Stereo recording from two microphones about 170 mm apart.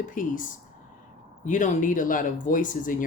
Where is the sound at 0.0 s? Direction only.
50° left (ahead or behind).